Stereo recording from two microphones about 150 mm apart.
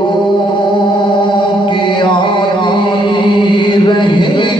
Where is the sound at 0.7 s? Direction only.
30° left (ahead or behind).